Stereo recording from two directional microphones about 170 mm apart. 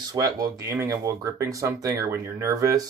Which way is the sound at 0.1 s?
20° right (ahead or behind).